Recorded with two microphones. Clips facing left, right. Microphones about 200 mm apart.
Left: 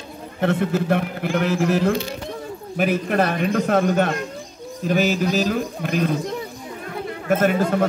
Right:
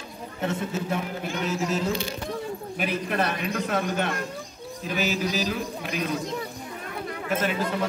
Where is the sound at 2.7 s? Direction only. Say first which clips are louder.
Left 8 dB; 50° left (ahead or behind).